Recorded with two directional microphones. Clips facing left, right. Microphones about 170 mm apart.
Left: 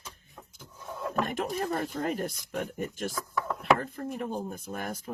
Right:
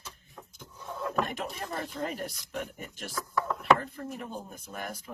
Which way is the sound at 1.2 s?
50° left (ahead or behind).